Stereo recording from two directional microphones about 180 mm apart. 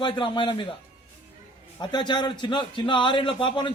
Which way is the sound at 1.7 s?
25° left (ahead or behind).